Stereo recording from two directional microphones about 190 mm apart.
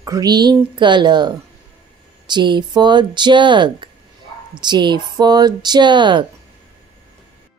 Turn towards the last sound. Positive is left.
turn(degrees=-25)  # may be behind; listen again after turning